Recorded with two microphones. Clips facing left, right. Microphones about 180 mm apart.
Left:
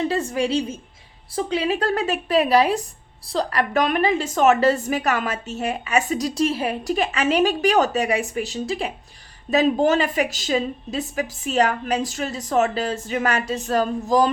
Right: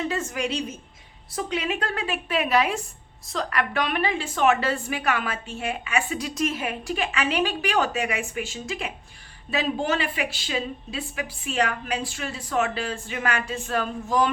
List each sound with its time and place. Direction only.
0.1 s a woman's voice: 35° left (ahead or behind)